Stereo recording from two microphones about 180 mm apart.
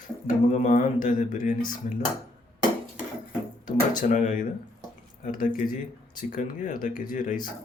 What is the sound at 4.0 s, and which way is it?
Speech, 45° left (ahead or behind).